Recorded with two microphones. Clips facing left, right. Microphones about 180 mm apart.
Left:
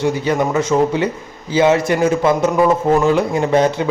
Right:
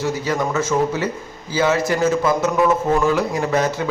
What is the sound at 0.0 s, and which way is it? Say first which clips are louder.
A man's voice: left 4 dB; 25° left (ahead or behind).